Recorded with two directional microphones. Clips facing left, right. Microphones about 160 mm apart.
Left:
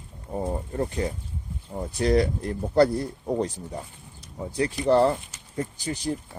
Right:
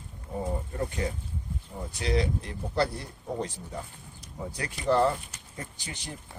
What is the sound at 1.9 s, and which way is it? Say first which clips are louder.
Speech: left 6 dB; 45° left (ahead or behind).